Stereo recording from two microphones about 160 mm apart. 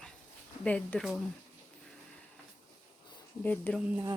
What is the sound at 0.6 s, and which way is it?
Speech, 10° left (ahead or behind).